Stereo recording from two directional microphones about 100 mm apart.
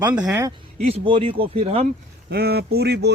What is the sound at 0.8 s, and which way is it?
A man's voice, 70° right (ahead or behind).